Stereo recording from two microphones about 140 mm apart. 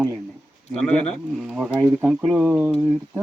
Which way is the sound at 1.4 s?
5° right (ahead or behind).